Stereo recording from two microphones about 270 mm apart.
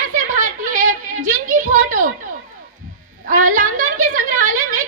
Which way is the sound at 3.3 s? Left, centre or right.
Right.